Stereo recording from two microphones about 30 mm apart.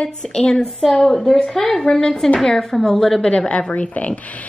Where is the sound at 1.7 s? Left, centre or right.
Left.